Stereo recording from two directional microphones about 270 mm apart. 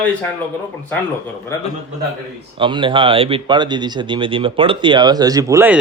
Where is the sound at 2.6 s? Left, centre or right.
Centre.